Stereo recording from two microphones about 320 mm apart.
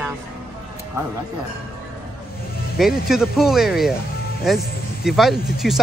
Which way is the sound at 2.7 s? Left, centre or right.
Centre.